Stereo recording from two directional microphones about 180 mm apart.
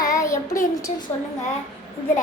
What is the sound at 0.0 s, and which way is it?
Child singing, 20° left (ahead or behind).